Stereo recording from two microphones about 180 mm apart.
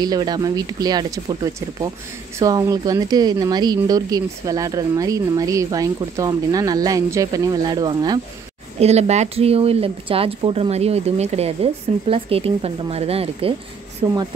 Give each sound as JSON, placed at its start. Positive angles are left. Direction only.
{"t": 0.0, "sound": "speech", "side_deg": -20}
{"t": 8.7, "sound": "speech", "side_deg": -35}